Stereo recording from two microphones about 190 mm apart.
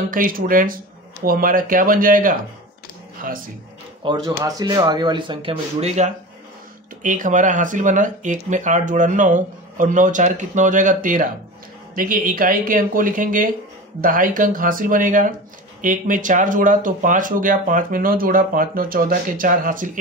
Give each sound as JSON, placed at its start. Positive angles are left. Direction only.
{"t": 0.1, "sound": "speech", "side_deg": -45}
{"t": 4.0, "sound": "speech", "side_deg": -20}